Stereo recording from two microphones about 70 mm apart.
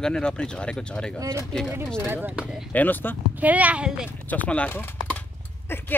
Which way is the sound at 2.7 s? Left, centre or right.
Left.